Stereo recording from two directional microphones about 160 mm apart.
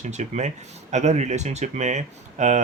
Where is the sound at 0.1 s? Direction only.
45° right (ahead or behind).